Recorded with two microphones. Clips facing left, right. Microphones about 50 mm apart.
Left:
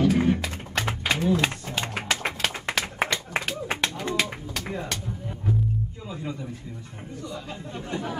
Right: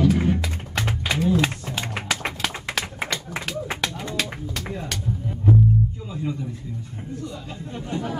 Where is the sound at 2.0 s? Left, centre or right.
Left.